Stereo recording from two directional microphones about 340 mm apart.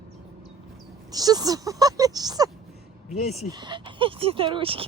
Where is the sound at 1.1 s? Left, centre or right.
Centre.